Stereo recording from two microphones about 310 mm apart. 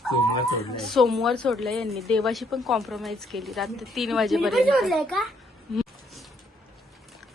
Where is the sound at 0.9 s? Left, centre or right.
Centre.